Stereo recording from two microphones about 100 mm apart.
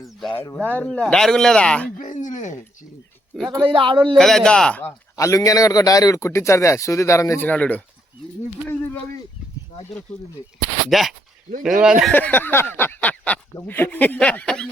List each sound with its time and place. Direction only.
0.5 s speech: 15° left (ahead or behind)
3.3 s speech: centre (ahead or behind)
3.7 s speech: 60° right (ahead or behind)
4.1 s speech: 5° left (ahead or behind)
5.1 s a man's voice: 35° left (ahead or behind)
7.4 s speech: 15° left (ahead or behind)
10.8 s speech: centre (ahead or behind)
12.1 s speech: 20° left (ahead or behind)